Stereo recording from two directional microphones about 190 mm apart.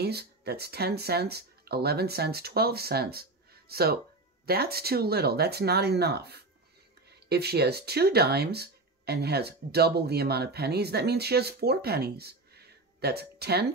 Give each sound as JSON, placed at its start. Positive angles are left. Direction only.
{"t": 0.0, "sound": "speech", "side_deg": -60}